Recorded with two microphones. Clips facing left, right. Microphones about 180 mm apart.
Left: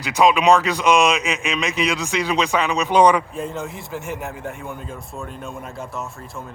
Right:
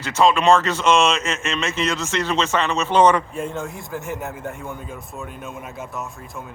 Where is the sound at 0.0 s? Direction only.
15° left (ahead or behind).